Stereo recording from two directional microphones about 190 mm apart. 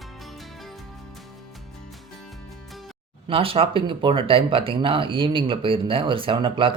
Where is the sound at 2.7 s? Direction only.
Centre (ahead or behind).